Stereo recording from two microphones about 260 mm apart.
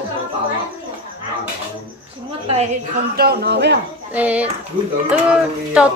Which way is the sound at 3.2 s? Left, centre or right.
Right.